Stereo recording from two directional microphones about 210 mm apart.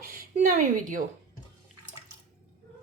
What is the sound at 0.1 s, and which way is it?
Speech, 40° right (ahead or behind).